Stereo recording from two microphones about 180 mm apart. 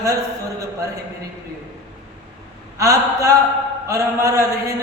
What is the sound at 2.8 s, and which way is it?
A man's voice, 15° right (ahead or behind).